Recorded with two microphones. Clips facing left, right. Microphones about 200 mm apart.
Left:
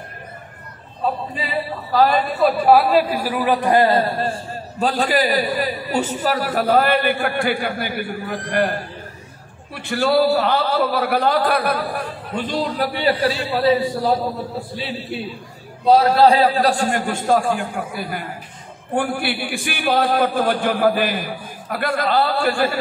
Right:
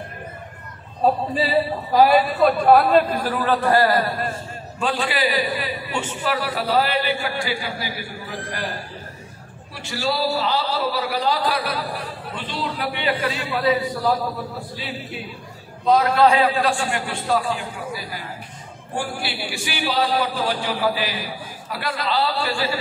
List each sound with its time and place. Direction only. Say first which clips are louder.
1.0 s a man's voice: right 4 dB; 35° right (ahead or behind)
1.9 s a man's voice: even; 10° right (ahead or behind); by 8.7 s 60° left (ahead or behind)
9.8 s a man's voice: left 7 dB; 55° left (ahead or behind); by 14.2 s 30° left (ahead or behind)
15.8 s a man's voice: left 3 dB; 30° left (ahead or behind); by 22.8 s 50° left (ahead or behind)